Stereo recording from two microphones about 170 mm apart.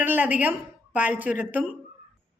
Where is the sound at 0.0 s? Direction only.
10° right (ahead or behind).